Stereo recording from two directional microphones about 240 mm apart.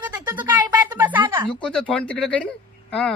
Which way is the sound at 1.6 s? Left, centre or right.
Centre.